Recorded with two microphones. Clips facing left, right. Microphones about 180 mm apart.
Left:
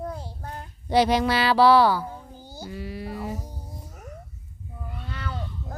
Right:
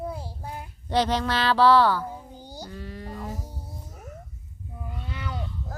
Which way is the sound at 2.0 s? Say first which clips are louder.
Right 1 dB; 10° right (ahead or behind).